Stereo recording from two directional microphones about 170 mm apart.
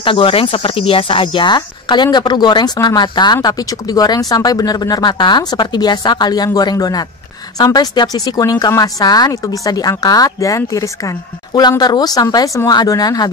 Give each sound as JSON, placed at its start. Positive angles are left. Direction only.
{"t": 0.0, "sound": "speech", "side_deg": 30}